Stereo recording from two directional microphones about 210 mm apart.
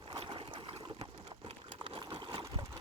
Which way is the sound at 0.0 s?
25° right (ahead or behind).